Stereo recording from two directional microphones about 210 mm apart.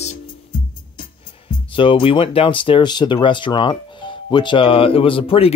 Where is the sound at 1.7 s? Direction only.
25° left (ahead or behind).